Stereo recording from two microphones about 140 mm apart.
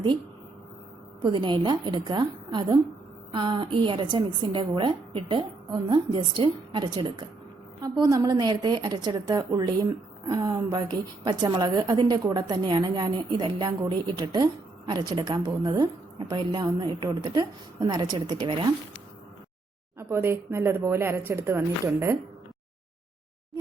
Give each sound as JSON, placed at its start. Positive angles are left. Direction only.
{"t": 1.2, "sound": "a woman's voice", "side_deg": -35}
{"t": 20.0, "sound": "speech", "side_deg": -15}